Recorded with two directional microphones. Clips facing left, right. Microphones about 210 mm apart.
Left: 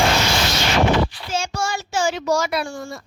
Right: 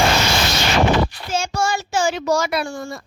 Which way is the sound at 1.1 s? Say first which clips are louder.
Right 2 dB; 50° right (ahead or behind).